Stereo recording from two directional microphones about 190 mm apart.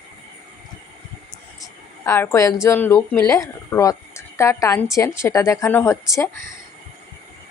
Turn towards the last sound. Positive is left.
turn(degrees=15)  # may be behind; listen again after turning